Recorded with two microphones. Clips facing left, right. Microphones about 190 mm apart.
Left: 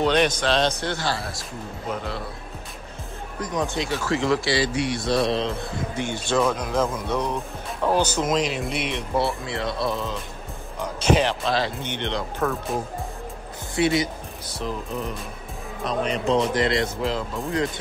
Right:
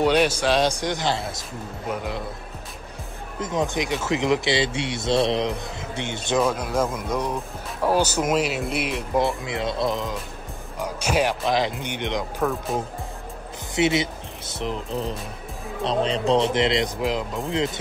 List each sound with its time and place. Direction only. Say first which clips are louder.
0.0 s speech: right 1 dB; 10° right (ahead or behind)
3.3 s speech: right 2 dB; 25° right (ahead or behind)
6.4 s speech: even; 5° right (ahead or behind)
9.4 s speech: right 1 dB; 20° right (ahead or behind)
13.7 s speech: even; 20° right (ahead or behind)
14.9 s speech: right 2 dB; 30° right (ahead or behind); by 17.4 s 15° right (ahead or behind)